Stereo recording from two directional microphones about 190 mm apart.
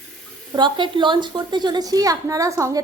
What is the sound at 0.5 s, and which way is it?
A woman's voice, 25° right (ahead or behind).